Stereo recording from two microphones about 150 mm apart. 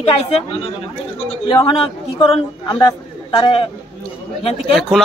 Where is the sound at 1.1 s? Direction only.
35° left (ahead or behind).